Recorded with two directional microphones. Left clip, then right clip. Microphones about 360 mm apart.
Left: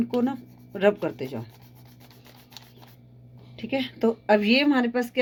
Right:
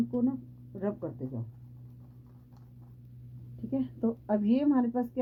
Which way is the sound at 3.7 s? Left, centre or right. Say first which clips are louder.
Left 8 dB; centre.